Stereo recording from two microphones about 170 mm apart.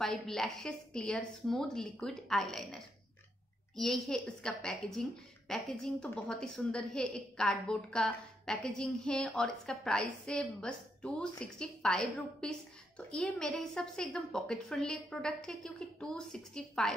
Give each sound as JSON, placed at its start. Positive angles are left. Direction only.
{"t": 0.0, "sound": "a woman's voice", "side_deg": 0}